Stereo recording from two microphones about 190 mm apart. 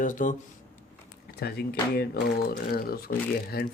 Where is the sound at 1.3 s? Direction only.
55° left (ahead or behind).